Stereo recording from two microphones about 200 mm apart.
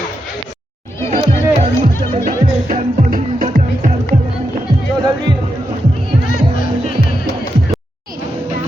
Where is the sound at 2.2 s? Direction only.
45° right (ahead or behind).